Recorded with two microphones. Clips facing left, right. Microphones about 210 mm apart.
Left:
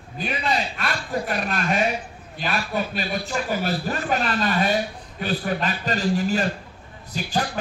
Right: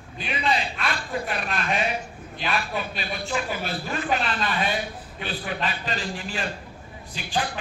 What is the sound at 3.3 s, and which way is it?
A man's voice, 40° left (ahead or behind).